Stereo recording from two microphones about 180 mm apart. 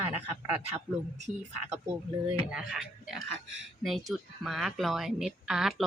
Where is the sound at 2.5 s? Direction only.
5° right (ahead or behind).